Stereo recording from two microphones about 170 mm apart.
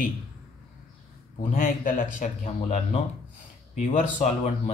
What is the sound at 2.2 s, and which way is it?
Speech, 40° left (ahead or behind).